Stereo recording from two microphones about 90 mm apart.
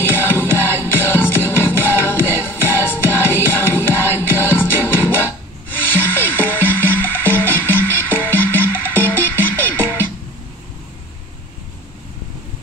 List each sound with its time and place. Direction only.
0.1 s music: 25° left (ahead or behind)